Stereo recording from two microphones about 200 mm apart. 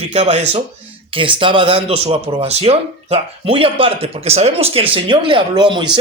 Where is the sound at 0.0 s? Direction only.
35° right (ahead or behind).